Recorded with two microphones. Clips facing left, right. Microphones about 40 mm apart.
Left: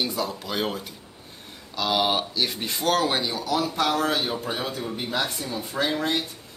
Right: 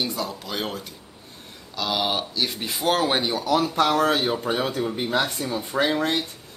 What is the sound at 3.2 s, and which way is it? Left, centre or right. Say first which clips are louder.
Speech: right 3 dB; right.